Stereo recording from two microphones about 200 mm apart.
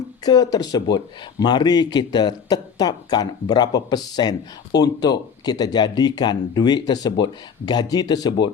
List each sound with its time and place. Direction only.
0.3 s speech: 20° left (ahead or behind)